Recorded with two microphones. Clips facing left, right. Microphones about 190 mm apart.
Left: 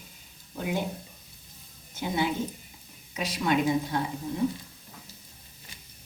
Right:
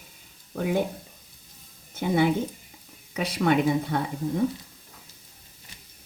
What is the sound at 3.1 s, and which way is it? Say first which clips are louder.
Speech: right 4 dB; 60° right (ahead or behind).